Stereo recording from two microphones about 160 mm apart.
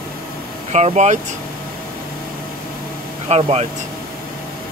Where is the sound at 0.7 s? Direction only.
45° right (ahead or behind).